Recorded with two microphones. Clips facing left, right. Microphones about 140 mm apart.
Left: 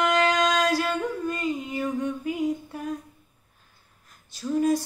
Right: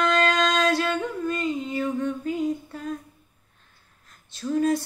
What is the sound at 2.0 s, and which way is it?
Humming, 15° left (ahead or behind).